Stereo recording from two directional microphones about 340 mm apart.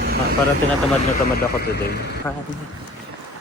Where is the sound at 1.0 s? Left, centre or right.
Left.